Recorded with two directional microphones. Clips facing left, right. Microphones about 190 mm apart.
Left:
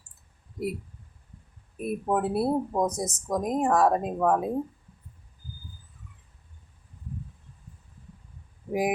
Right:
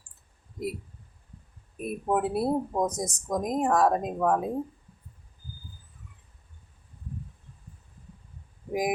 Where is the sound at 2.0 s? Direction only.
Centre (ahead or behind).